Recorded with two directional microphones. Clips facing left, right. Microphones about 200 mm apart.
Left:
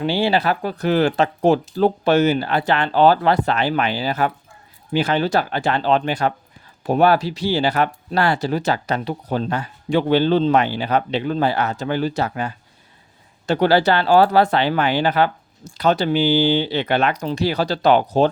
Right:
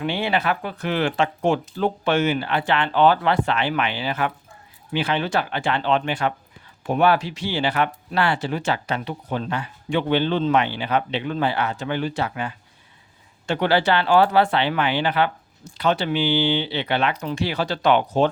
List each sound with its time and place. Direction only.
0.0 s speech: 35° left (ahead or behind)